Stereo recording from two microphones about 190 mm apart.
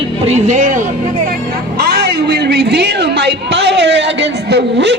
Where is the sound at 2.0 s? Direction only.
60° right (ahead or behind).